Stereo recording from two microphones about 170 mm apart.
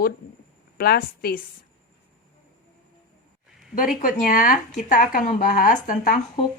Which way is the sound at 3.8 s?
55° left (ahead or behind).